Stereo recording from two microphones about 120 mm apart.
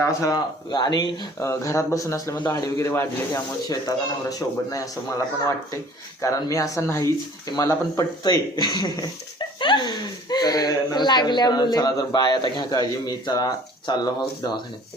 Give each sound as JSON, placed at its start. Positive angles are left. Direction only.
{"t": 0.2, "sound": "speech", "side_deg": 30}
{"t": 1.4, "sound": "speech", "side_deg": 25}
{"t": 6.2, "sound": "speech", "side_deg": 30}